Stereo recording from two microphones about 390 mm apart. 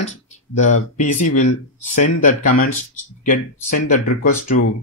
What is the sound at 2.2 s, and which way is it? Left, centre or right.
Speech, centre.